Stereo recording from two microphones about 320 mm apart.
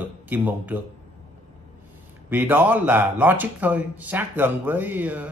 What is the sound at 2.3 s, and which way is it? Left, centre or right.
A man's voice, centre.